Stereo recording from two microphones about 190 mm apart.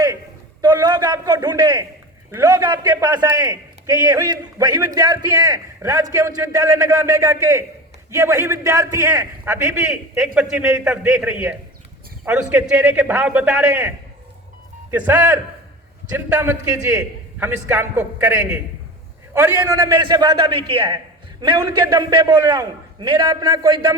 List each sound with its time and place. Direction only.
0.6 s a man's voice: 20° right (ahead or behind)